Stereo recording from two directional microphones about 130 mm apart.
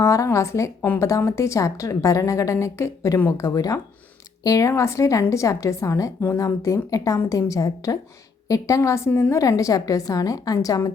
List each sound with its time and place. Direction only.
0.0 s a woman's voice: 25° left (ahead or behind)
9.0 s a woman's voice: 15° left (ahead or behind)
9.3 s a woman's voice: 25° left (ahead or behind)